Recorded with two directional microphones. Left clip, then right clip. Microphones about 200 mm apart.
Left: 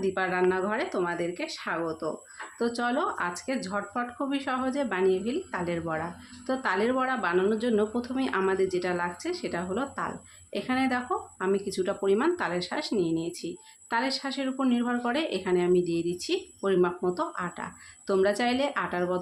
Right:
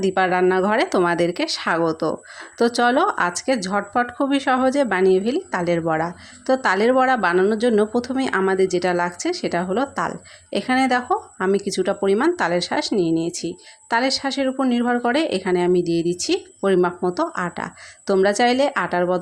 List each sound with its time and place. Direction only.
0.0 s speech: 35° right (ahead or behind)